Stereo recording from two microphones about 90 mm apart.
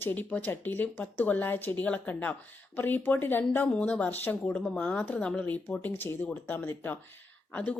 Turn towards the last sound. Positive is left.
turn(degrees=15)  # may be behind; listen again after turning